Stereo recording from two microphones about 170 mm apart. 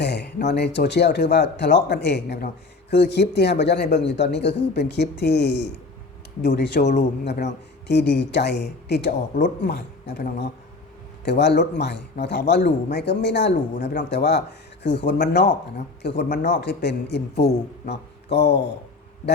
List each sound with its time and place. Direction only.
0.0 s a sound: 80° left
0.4 s speech: 80° left
3.9 s speech: 90° left
6.4 s speech: 70° left (ahead or behind)
11.3 s speech: 90° left